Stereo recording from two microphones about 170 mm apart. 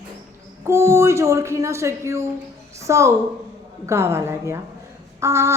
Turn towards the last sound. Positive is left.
turn(degrees=-15)  # may be behind; listen again after turning